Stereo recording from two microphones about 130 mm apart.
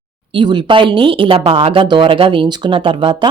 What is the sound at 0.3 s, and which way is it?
Speech, 35° right (ahead or behind).